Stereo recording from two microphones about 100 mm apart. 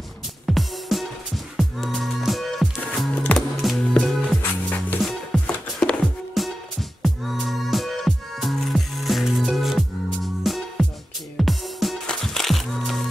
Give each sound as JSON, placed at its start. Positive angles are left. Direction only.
{"t": 0.5, "sound": "music", "side_deg": 0}
{"t": 3.2, "sound": "music", "side_deg": 10}
{"t": 4.4, "sound": "music", "side_deg": 20}
{"t": 5.0, "sound": "music", "side_deg": 5}